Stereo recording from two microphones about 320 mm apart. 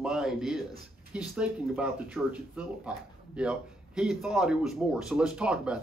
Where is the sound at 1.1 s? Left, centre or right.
Centre.